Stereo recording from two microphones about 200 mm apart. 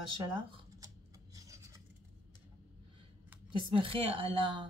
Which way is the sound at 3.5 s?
25° right (ahead or behind).